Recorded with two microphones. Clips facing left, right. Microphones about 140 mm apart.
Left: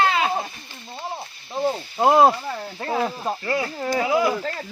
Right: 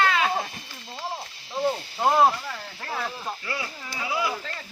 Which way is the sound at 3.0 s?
45° left (ahead or behind).